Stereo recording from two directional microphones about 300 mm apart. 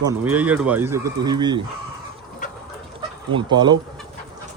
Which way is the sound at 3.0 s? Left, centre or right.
Centre.